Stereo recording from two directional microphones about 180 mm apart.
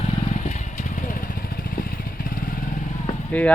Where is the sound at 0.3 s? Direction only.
40° left (ahead or behind).